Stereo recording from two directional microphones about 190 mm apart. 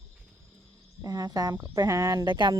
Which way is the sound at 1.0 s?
20° right (ahead or behind).